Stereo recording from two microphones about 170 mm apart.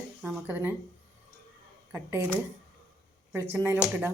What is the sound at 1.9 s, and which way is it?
Speech, 15° right (ahead or behind).